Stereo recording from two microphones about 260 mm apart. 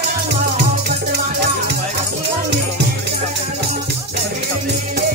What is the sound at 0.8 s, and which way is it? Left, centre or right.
Music, right.